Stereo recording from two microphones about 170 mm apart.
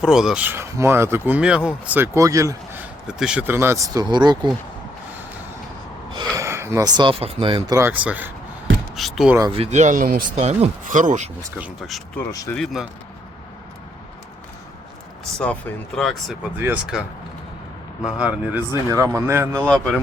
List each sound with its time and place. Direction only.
0.0 s speech: 5° right (ahead or behind)
3.1 s speech: 5° right (ahead or behind); by 4.4 s 25° right (ahead or behind)
6.3 s speech: 15° right (ahead or behind); by 7.6 s 35° right (ahead or behind)
7.7 s speech: 15° right (ahead or behind)
9.5 s speech: 40° right (ahead or behind); by 10.4 s 55° right (ahead or behind)
10.4 s speech: 45° right (ahead or behind)
11.5 s speech: 5° right (ahead or behind)
16.0 s speech: centre (ahead or behind)
18.0 s speech: 5° right (ahead or behind)
19.6 s speech: 5° left (ahead or behind)